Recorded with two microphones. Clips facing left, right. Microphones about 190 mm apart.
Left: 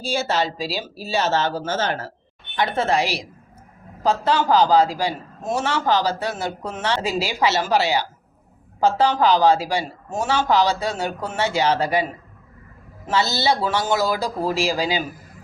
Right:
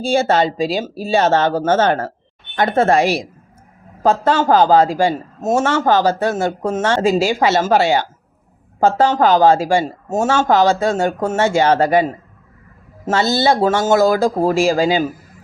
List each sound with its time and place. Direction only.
0.0 s a man's voice: 55° right (ahead or behind)
13.1 s a man's voice: 50° right (ahead or behind)